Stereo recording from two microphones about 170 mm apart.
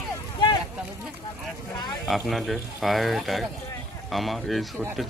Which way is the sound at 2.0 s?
Centre (ahead or behind).